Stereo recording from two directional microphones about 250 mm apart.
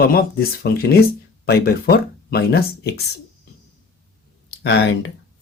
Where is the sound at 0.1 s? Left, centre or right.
Left.